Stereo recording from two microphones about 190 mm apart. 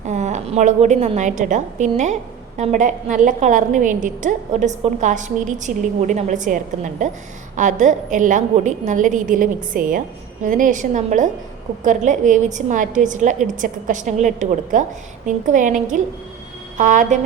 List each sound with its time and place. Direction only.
0.0 s a woman's voice: 40° right (ahead or behind)